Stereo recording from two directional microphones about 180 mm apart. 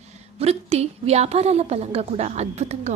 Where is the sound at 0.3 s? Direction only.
35° right (ahead or behind).